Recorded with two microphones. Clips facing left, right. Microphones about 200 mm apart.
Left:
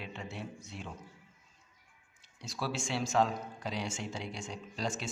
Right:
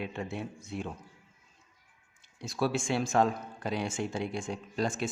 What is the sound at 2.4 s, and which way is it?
Speech, 55° right (ahead or behind).